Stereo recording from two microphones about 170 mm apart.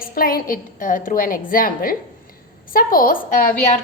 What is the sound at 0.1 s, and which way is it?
A woman's voice, 60° left (ahead or behind).